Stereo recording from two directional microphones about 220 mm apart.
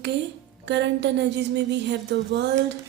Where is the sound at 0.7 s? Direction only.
55° right (ahead or behind).